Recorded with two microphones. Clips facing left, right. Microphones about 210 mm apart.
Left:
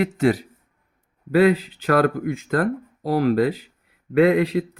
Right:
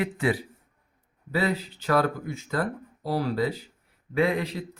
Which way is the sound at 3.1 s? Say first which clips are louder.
Left 8 dB; 90° left.